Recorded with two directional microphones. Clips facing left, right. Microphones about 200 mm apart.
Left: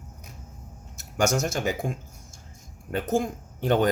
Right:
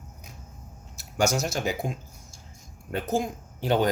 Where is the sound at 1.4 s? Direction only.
50° left (ahead or behind).